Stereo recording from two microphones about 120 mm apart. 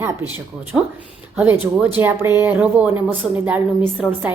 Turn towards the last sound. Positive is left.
turn(degrees=-10)  # may be behind; listen again after turning